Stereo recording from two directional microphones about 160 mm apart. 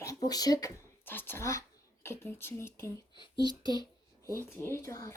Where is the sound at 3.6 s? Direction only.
25° left (ahead or behind).